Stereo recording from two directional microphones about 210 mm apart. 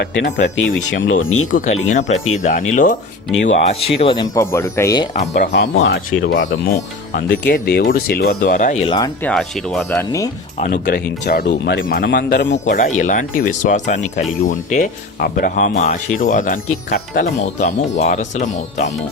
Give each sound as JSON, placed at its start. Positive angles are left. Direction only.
{"t": 0.0, "sound": "speech", "side_deg": 55}
{"t": 1.5, "sound": "speech", "side_deg": 35}
{"t": 4.4, "sound": "speech", "side_deg": 15}
{"t": 5.2, "sound": "speech", "side_deg": 35}
{"t": 5.5, "sound": "speech", "side_deg": 60}
{"t": 9.2, "sound": "speech", "side_deg": 0}
{"t": 10.6, "sound": "speech", "side_deg": 40}
{"t": 12.6, "sound": "speech", "side_deg": 40}